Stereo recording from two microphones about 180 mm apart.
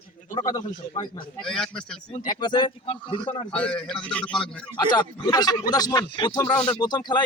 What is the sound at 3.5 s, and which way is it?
A man's voice, 5° left (ahead or behind).